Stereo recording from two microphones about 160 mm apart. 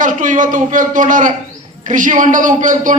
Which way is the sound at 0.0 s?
55° right (ahead or behind).